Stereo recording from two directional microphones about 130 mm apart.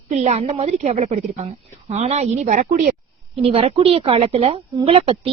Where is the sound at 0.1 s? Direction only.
60° right (ahead or behind).